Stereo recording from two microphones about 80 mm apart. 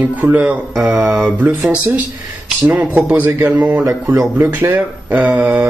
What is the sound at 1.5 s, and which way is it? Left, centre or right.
Speech, right.